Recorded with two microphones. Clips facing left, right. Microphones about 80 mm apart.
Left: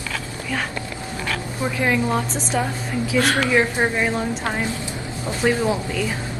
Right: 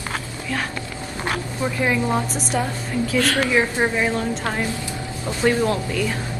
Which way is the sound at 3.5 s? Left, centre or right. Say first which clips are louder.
Even; centre.